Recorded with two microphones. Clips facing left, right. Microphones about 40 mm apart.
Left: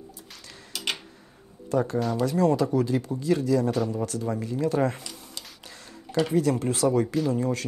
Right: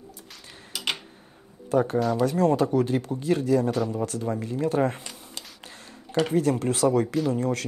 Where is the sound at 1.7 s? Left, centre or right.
Right.